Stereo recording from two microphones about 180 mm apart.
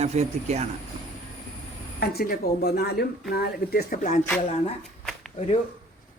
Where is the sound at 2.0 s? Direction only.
60° left (ahead or behind).